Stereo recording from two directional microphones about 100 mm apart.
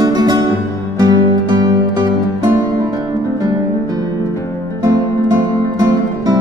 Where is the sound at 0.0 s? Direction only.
45° right (ahead or behind).